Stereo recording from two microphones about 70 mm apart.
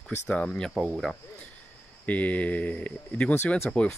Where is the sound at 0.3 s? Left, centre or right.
Centre.